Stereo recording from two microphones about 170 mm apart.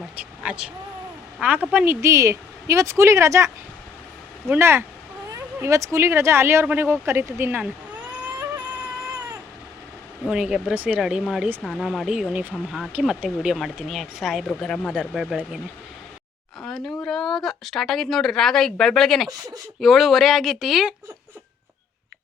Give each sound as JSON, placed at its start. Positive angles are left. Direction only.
{"t": 0.2, "sound": "a woman's voice", "side_deg": -5}
{"t": 10.2, "sound": "speech", "side_deg": -5}
{"t": 16.6, "sound": "speech", "side_deg": 0}